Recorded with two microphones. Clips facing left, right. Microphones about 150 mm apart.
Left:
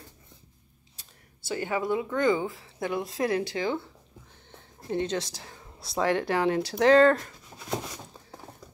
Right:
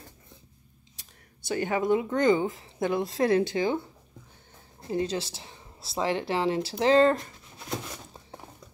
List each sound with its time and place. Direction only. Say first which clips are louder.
1.6 s a woman's voice: right 3 dB; 20° right (ahead or behind)
5.0 s a woman's voice: even; 30° right (ahead or behind)